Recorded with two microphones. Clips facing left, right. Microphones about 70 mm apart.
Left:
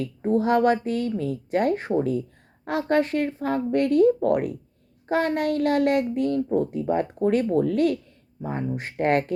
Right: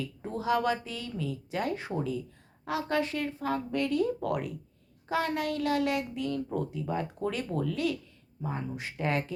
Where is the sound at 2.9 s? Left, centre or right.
Left.